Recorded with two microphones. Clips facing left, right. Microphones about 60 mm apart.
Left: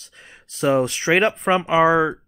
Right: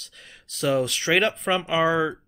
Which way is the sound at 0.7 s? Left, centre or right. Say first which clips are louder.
Left 4 dB; left.